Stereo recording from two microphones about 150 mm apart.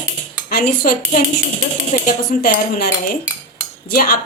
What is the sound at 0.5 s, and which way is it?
Speech, 90° left.